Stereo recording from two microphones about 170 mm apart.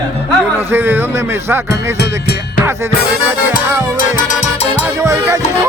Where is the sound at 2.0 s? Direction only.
70° left (ahead or behind).